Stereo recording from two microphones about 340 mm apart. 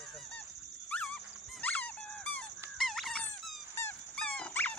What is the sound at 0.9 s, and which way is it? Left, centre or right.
Dog, centre.